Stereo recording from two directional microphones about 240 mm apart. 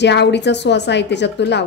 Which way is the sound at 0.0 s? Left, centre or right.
Left.